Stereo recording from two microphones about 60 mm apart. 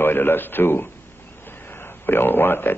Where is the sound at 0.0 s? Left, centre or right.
Left.